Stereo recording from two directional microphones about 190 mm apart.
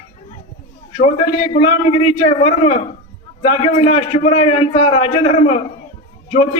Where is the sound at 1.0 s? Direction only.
30° left (ahead or behind).